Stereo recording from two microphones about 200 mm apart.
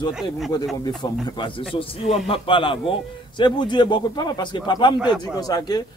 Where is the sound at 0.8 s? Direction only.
20° left (ahead or behind).